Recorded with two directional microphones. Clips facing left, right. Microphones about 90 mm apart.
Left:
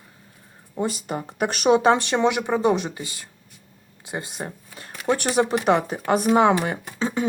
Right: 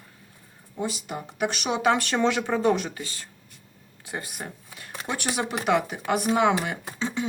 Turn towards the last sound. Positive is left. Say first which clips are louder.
# left 4 dB
turn(degrees=40)  # may be behind; listen again after turning